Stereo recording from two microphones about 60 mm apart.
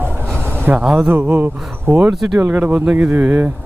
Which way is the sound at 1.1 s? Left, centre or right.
Right.